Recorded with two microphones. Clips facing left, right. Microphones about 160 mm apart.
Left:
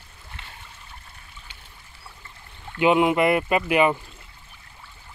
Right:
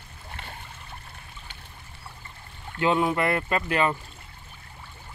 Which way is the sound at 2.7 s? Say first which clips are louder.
Left 5 dB; 15° left (ahead or behind).